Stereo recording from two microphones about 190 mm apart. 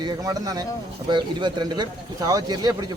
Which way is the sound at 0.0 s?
20° right (ahead or behind).